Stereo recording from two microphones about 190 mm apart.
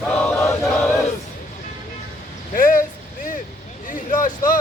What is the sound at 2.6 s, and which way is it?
Vehicle, 45° left (ahead or behind).